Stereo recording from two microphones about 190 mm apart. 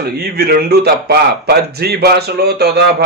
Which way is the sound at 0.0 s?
55° right (ahead or behind).